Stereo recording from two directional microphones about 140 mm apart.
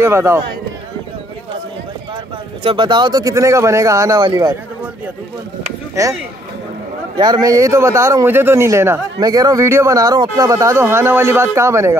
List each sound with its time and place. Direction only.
0.0 s a man's voice: 20° right (ahead or behind)
2.6 s a man's voice: 35° right (ahead or behind)
6.0 s a man's voice: 20° right (ahead or behind)
7.2 s a man's voice: 30° right (ahead or behind)